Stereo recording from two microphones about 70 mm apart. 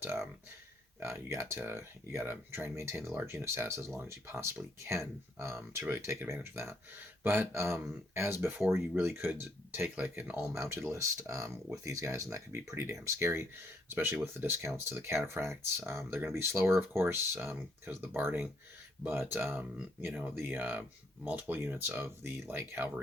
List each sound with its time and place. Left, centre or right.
0.0 s speech: right
10.5 s speech: right